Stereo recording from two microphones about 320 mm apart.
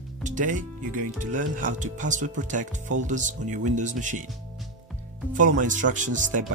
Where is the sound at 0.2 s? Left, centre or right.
Right.